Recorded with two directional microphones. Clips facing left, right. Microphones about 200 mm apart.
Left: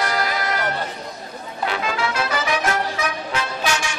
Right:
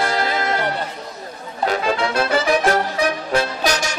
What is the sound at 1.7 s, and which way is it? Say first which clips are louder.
Music: right 5 dB; 35° right (ahead or behind).